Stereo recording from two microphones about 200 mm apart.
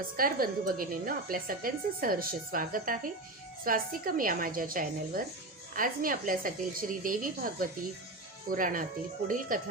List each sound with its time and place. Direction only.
0.2 s a woman's voice: 45° right (ahead or behind)